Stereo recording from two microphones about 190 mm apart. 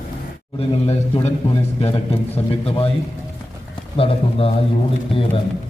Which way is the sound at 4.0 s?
30° left (ahead or behind).